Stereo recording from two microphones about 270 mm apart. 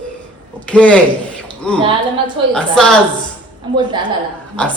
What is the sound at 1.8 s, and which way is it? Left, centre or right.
Speech, centre.